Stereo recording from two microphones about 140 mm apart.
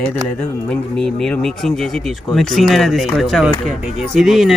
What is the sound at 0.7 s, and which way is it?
Speech, 5° left (ahead or behind).